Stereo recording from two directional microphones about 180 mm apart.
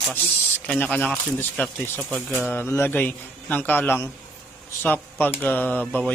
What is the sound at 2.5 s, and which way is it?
A man's voice, 10° left (ahead or behind).